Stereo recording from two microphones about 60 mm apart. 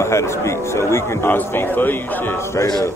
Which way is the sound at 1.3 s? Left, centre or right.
Left.